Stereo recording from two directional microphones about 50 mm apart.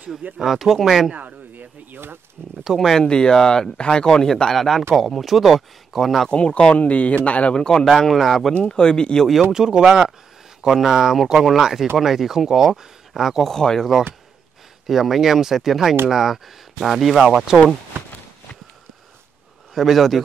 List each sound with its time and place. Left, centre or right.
0.4 s speech: centre
1.1 s speech: right
2.6 s speech: centre
2.9 s speech: centre
6.2 s speech: centre
7.5 s speech: centre
7.9 s speech: centre
8.5 s speech: centre
9.5 s speech: centre
13.4 s speech: centre
14.9 s speech: centre
19.7 s speech: centre